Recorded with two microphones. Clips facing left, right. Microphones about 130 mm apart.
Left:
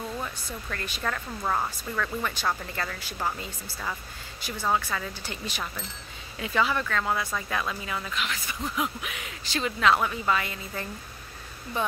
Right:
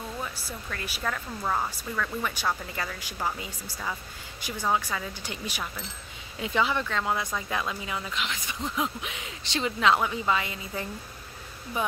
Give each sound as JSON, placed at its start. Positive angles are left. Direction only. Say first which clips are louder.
{"t": 0.2, "sound": "speech", "louder": "left 1 dB", "side_deg": -5}
{"t": 1.8, "sound": "speech", "louder": "left 1 dB", "side_deg": -10}